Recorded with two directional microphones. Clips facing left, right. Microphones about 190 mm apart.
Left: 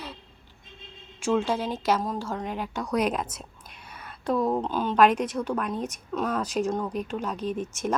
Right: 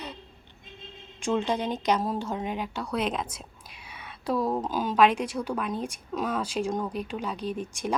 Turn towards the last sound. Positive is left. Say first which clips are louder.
# left 2 dB
turn(degrees=-35)  # may be behind; listen again after turning